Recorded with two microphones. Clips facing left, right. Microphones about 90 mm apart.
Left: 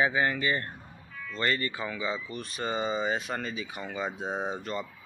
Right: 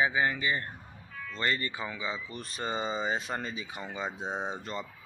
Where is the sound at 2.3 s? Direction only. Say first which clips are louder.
Left 2 dB; 30° right (ahead or behind).